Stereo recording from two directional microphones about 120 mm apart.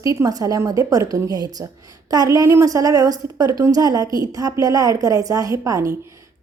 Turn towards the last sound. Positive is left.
turn(degrees=-25)  # may be behind; listen again after turning